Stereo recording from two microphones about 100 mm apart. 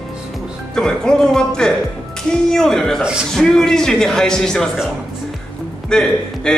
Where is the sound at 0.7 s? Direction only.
5° left (ahead or behind).